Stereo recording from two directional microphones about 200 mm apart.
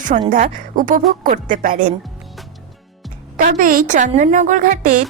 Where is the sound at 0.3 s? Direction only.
40° right (ahead or behind).